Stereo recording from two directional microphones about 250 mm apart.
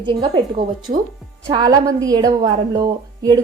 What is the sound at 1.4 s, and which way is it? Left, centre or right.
Speech, centre.